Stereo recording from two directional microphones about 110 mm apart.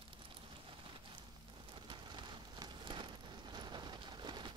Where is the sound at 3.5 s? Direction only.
40° right (ahead or behind).